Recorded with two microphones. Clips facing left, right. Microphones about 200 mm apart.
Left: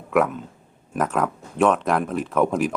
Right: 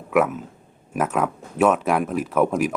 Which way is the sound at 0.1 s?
5° right (ahead or behind).